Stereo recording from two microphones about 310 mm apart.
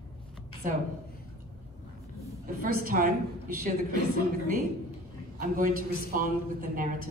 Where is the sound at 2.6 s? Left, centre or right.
Right.